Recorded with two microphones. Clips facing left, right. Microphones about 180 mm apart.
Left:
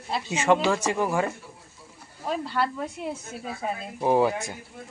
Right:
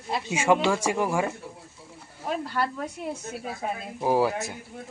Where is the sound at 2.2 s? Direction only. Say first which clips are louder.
Left 1 dB; 10° right (ahead or behind).